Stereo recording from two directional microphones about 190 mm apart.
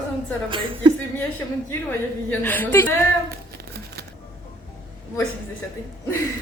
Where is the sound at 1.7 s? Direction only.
10° left (ahead or behind).